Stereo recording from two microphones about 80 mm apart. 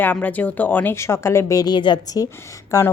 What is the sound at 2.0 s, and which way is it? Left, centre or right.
Speech, left.